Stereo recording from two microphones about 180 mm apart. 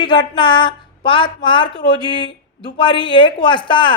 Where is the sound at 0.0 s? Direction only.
25° left (ahead or behind).